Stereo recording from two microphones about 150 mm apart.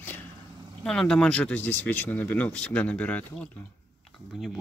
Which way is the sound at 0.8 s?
5° left (ahead or behind).